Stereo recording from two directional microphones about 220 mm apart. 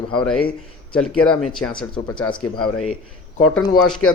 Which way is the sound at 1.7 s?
20° left (ahead or behind).